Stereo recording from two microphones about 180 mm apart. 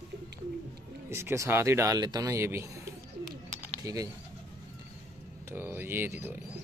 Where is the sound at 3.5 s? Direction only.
15° right (ahead or behind).